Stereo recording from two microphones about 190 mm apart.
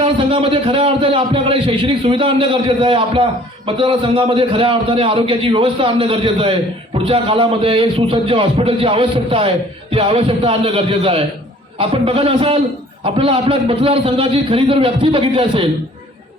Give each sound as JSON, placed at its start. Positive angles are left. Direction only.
{"t": 0.0, "sound": "a man's voice", "side_deg": -30}